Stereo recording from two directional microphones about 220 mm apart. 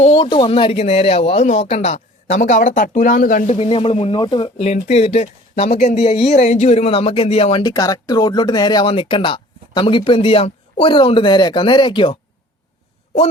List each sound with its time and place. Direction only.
0.0 s a man's voice: 25° left (ahead or behind)